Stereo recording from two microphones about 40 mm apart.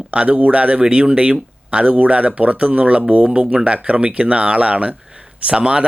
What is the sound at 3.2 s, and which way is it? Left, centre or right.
Speech, right.